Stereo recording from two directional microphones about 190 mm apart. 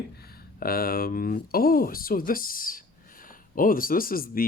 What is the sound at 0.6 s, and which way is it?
Speech, 50° left (ahead or behind).